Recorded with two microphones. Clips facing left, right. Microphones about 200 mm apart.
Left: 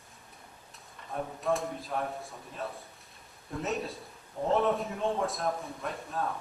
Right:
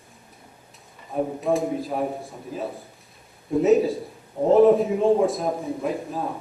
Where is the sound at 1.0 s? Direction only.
5° right (ahead or behind).